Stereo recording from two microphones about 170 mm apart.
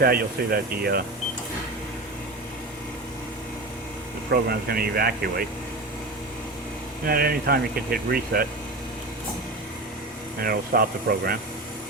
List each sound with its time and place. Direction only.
0.0 s speech: 60° right (ahead or behind)
4.3 s speech: 65° right (ahead or behind)
7.0 s speech: 65° right (ahead or behind)
10.4 s speech: 60° right (ahead or behind)